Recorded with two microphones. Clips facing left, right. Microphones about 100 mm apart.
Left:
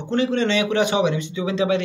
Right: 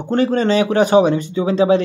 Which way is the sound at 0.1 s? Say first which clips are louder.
Right 5 dB; 45° right (ahead or behind).